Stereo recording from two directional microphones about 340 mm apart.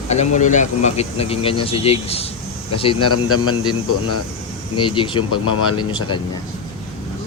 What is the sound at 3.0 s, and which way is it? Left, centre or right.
Speech, left.